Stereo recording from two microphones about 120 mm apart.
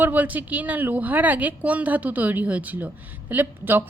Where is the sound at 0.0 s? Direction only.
15° right (ahead or behind).